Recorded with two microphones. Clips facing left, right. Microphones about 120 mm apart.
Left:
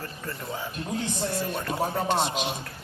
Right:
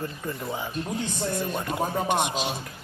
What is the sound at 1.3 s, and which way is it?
A man's voice, 15° right (ahead or behind).